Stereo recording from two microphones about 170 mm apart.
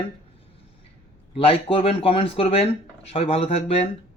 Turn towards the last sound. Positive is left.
turn(degrees=35)  # may be behind; listen again after turning